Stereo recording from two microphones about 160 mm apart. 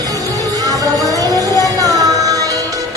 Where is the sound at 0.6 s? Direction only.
20° right (ahead or behind).